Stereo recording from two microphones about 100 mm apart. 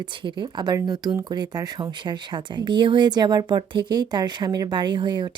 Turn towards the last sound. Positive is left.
turn(degrees=-50)  # may be behind; listen again after turning